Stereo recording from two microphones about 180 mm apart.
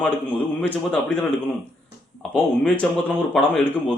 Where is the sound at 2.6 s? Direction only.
5° left (ahead or behind).